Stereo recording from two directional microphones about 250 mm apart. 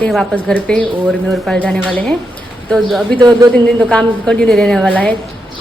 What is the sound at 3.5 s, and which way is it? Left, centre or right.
A woman's voice, centre.